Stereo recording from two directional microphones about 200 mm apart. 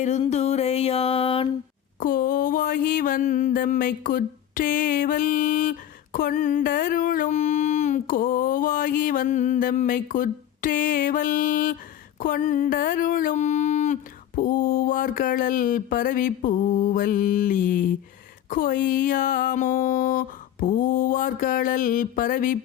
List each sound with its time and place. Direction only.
0.0 s music: 35° left (ahead or behind)
2.0 s speech: 45° left (ahead or behind)